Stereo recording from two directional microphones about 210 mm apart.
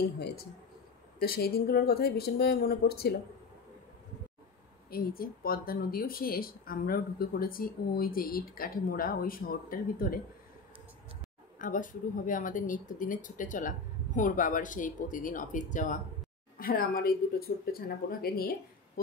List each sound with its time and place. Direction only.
1.2 s speech: 45° left (ahead or behind)
4.9 s speech: 45° left (ahead or behind)
11.5 s speech: 40° left (ahead or behind)